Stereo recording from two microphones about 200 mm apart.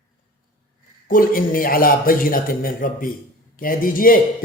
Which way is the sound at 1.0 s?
45° left (ahead or behind).